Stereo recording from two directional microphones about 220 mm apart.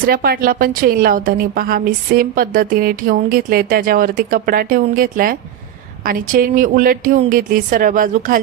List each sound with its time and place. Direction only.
0.0 s a woman's voice: 40° right (ahead or behind)